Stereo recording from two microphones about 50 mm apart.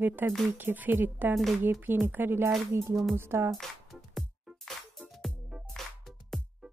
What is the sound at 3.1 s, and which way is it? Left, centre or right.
Speech, right.